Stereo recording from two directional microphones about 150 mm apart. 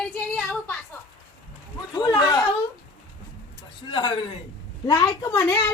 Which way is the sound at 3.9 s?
35° left (ahead or behind).